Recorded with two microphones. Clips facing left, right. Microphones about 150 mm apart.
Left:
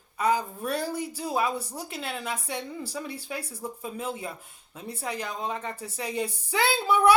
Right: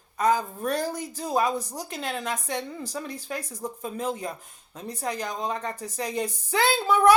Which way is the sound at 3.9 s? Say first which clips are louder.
Right 3 dB; 40° right (ahead or behind).